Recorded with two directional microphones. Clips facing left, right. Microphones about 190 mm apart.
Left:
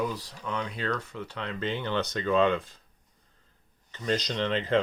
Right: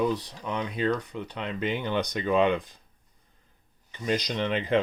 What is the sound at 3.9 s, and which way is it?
Speech, 15° right (ahead or behind).